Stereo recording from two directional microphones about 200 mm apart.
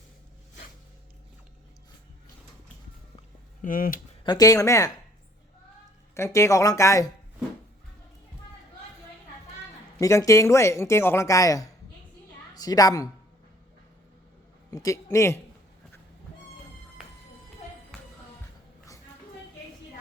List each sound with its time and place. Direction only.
3.6 s speech: 45° left (ahead or behind)
4.2 s speech: 20° left (ahead or behind)
6.1 s speech: 15° left (ahead or behind)
10.0 s a woman's voice: 15° left (ahead or behind)
14.7 s speech: 15° left (ahead or behind)